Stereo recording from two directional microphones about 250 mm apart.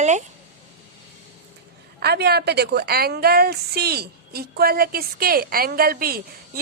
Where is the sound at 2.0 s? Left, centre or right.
Right.